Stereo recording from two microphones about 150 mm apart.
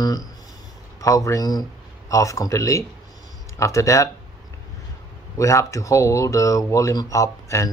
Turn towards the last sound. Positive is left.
turn(degrees=20)  # may be behind; listen again after turning